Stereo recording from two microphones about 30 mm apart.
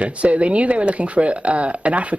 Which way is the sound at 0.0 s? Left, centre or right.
Right.